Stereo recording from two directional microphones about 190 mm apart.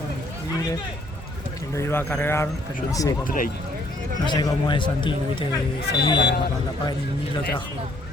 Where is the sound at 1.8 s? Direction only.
10° left (ahead or behind).